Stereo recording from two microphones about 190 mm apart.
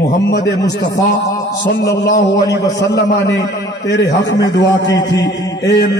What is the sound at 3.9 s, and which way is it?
Speech, 65° left (ahead or behind).